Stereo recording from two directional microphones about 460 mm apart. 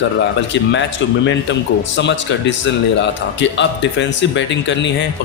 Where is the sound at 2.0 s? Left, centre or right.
Left.